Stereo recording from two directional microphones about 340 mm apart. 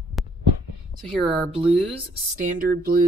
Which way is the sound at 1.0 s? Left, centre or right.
Centre.